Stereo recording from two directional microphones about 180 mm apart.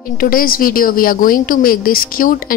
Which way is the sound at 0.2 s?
55° left (ahead or behind).